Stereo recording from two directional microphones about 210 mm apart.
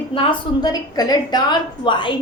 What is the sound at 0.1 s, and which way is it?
A woman's voice, 25° left (ahead or behind).